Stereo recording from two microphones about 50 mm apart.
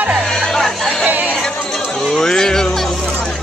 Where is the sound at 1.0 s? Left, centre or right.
Right.